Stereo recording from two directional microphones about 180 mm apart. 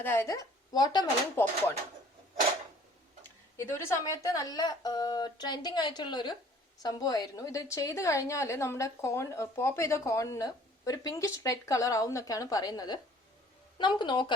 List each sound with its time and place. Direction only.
0.0 s a woman's voice: 15° left (ahead or behind)
3.6 s a woman's voice: 15° left (ahead or behind)